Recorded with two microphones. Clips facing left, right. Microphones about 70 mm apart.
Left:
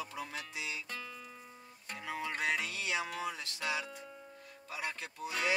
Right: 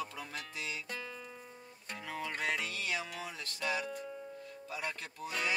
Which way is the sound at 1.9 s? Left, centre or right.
Left.